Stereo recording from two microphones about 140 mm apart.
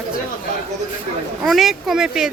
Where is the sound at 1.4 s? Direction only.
Centre (ahead or behind).